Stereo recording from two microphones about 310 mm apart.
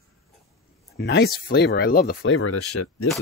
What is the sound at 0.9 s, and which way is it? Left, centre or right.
Speech, left.